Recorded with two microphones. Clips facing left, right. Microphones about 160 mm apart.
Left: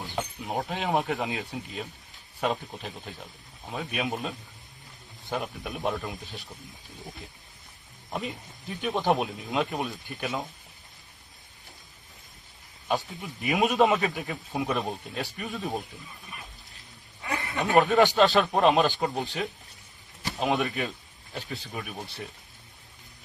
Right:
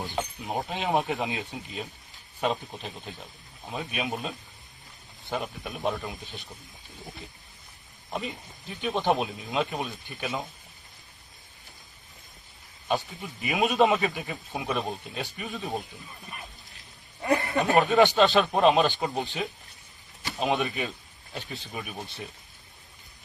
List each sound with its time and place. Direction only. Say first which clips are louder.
0.2 s a man's voice: left 1 dB; centre (ahead or behind)
8.1 s a man's voice: even; centre (ahead or behind)
13.2 s a man's voice: left 3 dB; centre (ahead or behind)
17.4 s speech: right 3 dB; 40° right (ahead or behind)
17.7 s a man's voice: left 1 dB; centre (ahead or behind)
20.3 s a man's voice: even; centre (ahead or behind)